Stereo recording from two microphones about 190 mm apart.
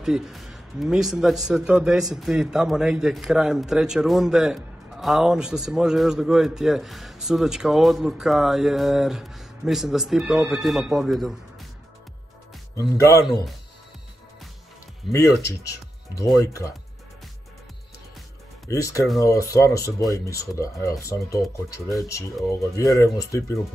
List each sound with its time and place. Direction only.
0.0 s a man's voice: centre (ahead or behind)
12.9 s speech: 15° left (ahead or behind)
15.0 s a man's voice: centre (ahead or behind)
16.2 s speech: 15° left (ahead or behind)
18.7 s speech: 15° left (ahead or behind)